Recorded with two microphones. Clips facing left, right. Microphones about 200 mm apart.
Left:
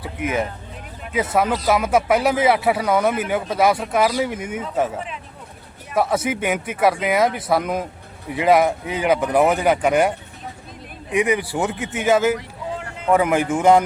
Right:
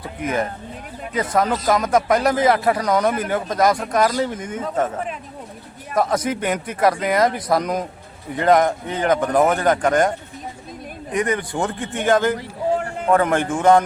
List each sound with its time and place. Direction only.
0.0 s speech: 5° left (ahead or behind)
5.9 s speech: 5° left (ahead or behind)
12.7 s a sound: 45° right (ahead or behind)
13.1 s speech: 5° left (ahead or behind)